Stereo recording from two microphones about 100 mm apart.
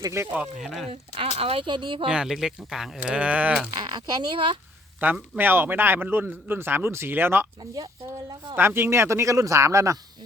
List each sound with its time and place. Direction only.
0.0 s speech: 25° right (ahead or behind)
0.3 s speech: 5° right (ahead or behind)
0.9 s speech: 85° right
1.6 s speech: 50° right (ahead or behind)
2.0 s speech: 5° right (ahead or behind)
3.8 s speech: 50° right (ahead or behind)
5.0 s speech: 20° right (ahead or behind)
8.5 s speech: 20° right (ahead or behind)